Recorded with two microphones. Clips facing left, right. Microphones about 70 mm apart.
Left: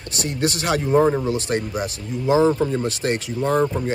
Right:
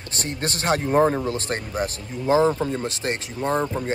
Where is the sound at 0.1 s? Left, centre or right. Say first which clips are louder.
Left 5 dB; right.